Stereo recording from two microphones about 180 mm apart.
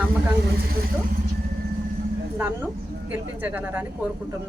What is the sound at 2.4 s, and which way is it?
Speech, 15° right (ahead or behind).